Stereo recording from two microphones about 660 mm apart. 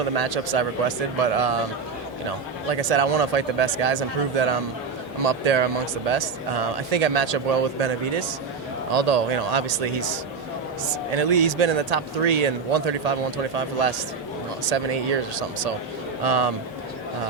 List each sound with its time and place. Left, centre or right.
0.1 s speech: right
2.6 s speech: right
8.9 s speech: right
16.2 s speech: right